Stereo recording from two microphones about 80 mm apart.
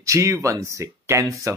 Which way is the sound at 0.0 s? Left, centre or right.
Right.